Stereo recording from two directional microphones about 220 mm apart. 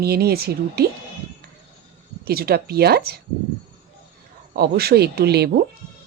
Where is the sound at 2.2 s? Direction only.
45° right (ahead or behind).